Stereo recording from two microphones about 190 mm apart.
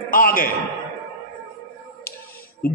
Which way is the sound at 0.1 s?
45° left (ahead or behind).